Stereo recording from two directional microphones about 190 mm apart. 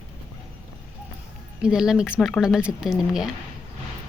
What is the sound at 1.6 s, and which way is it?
A woman's voice, 5° right (ahead or behind).